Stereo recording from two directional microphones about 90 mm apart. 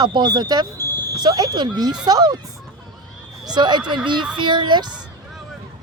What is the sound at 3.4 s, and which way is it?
Speech, 55° right (ahead or behind).